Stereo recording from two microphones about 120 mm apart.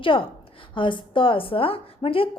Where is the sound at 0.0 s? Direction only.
45° left (ahead or behind).